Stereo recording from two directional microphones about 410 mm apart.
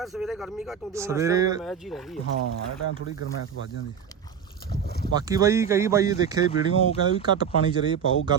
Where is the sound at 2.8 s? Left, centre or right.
Left.